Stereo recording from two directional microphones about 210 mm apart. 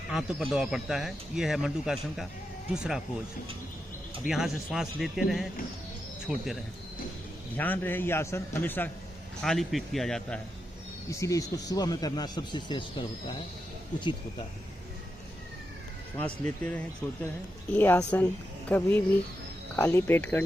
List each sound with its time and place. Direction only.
0.1 s speech: 5° right (ahead or behind)
4.3 s a man's voice: centre (ahead or behind)
11.1 s speech: 15° left (ahead or behind)
16.1 s a man's voice: 5° left (ahead or behind)